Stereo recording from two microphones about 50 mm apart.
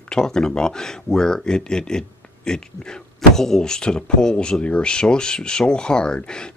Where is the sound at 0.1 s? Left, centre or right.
Centre.